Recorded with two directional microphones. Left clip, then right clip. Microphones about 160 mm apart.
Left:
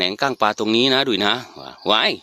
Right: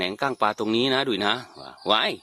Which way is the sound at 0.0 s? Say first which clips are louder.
Left 5 dB; 30° left (ahead or behind).